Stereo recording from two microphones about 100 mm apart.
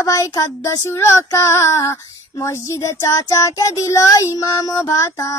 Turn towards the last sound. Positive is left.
turn(degrees=30)  # may be behind; listen again after turning